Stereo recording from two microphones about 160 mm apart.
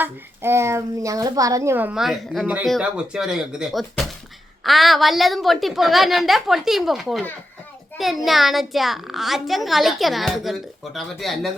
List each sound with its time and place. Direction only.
0.0 s a child's voice: 15° right (ahead or behind); by 11.5 s centre (ahead or behind)